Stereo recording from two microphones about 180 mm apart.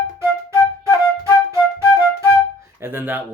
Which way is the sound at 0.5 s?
20° left (ahead or behind).